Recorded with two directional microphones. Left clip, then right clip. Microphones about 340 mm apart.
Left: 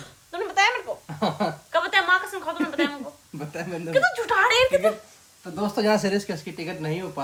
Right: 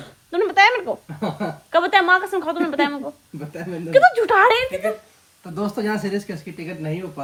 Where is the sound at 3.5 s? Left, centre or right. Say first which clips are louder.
Right 1 dB; centre.